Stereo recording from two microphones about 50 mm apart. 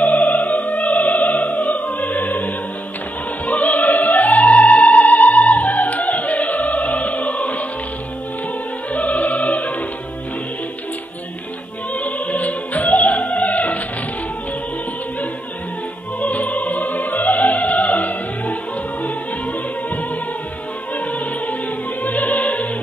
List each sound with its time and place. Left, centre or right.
0.0 s opera: left
3.4 s music: left
7.0 s opera: left
8.9 s opera: left
11.9 s opera: left
16.2 s opera: left
21.0 s music: left
22.0 s opera: left